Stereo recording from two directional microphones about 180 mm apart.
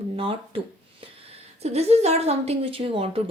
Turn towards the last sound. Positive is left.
turn(degrees=-30)  # may be behind; listen again after turning